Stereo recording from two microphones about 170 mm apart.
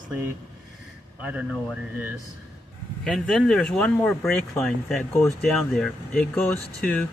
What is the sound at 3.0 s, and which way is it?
Speech, 5° left (ahead or behind).